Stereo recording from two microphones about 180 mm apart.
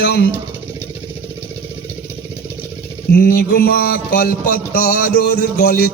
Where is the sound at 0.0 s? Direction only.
65° left (ahead or behind).